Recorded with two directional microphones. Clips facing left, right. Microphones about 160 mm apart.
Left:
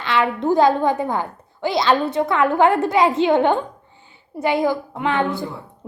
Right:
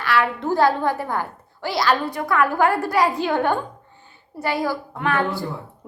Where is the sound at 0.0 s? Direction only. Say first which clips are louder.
Left 2 dB; 20° left (ahead or behind).